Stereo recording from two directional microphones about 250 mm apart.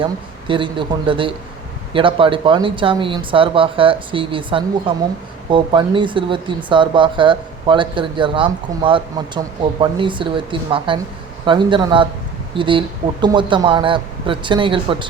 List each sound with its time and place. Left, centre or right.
0.0 s speech: centre